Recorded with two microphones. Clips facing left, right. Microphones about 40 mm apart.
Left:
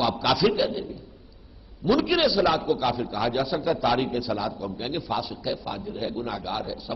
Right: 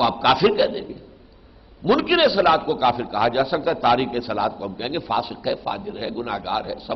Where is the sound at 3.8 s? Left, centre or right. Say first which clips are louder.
Right 7 dB; right.